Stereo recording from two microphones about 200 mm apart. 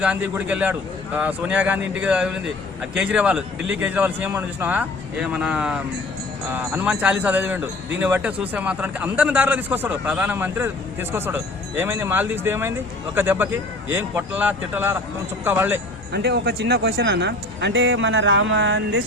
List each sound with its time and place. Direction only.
0.0 s a man's voice: 5° right (ahead or behind)
16.1 s speech: 55° right (ahead or behind)